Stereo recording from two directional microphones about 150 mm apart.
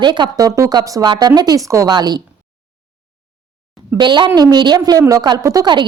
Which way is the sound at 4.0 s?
30° right (ahead or behind).